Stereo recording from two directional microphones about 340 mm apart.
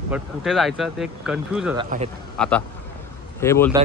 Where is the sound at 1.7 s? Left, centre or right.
Centre.